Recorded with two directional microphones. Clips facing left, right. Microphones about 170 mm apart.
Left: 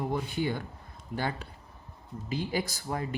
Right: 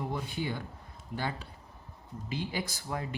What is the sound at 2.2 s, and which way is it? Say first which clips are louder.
Speech: left 4 dB; 40° left (ahead or behind).